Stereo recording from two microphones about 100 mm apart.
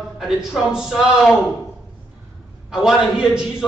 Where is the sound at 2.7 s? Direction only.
5° right (ahead or behind).